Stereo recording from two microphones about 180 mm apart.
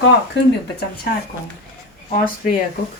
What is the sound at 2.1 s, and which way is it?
Speech, 50° left (ahead or behind).